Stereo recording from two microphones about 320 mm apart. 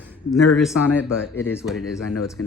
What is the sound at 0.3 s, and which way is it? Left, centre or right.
Speech, centre.